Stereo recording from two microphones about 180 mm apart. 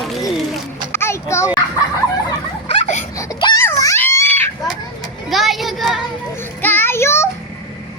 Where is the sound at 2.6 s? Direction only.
40° left (ahead or behind).